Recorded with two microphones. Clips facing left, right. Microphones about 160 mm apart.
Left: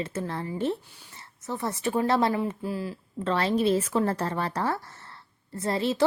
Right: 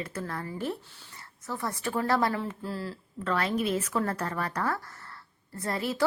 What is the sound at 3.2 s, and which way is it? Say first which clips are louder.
Speech: left 4 dB; 25° left (ahead or behind).